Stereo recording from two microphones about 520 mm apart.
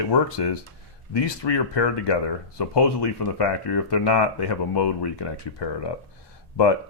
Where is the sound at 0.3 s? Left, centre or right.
Left.